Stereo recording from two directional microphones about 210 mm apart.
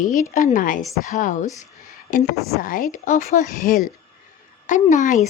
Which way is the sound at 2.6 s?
40° left (ahead or behind).